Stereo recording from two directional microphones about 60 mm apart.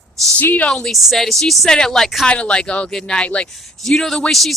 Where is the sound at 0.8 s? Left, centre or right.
Centre.